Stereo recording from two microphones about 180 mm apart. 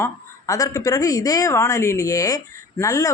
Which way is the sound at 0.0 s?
15° left (ahead or behind).